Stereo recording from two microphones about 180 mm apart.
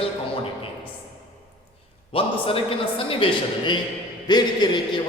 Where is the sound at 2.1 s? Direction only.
30° left (ahead or behind).